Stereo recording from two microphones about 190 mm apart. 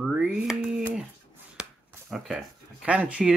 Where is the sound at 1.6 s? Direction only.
Centre (ahead or behind).